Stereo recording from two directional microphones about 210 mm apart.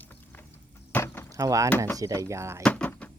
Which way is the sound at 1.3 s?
15° right (ahead or behind).